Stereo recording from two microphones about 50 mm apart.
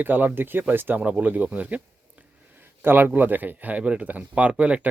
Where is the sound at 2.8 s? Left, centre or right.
Right.